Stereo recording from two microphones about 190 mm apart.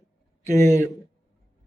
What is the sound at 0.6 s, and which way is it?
Speech, 15° left (ahead or behind).